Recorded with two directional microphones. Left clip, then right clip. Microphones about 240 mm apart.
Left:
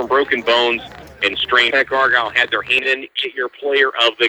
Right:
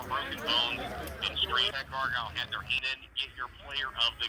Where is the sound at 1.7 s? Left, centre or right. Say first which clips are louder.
Left 18 dB; centre.